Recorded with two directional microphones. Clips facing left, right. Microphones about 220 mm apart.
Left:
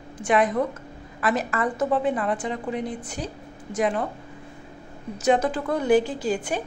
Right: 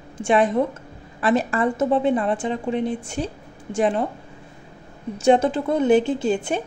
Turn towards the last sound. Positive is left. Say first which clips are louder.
# right 4 dB
turn(degrees=-25)  # may be behind; listen again after turning